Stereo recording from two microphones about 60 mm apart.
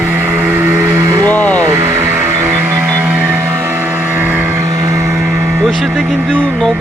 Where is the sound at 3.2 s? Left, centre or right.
Right.